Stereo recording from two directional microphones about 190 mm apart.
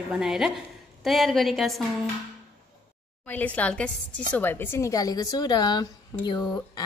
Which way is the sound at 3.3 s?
10° left (ahead or behind).